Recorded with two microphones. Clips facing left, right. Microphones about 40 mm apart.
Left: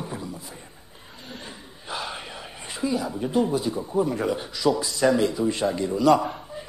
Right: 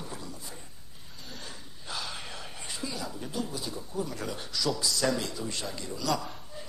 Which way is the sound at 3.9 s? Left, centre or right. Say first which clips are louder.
Left 11 dB; left.